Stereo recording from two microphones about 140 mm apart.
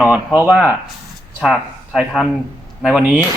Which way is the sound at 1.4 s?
Centre (ahead or behind).